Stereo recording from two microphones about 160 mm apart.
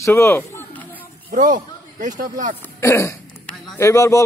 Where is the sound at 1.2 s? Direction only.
55° right (ahead or behind).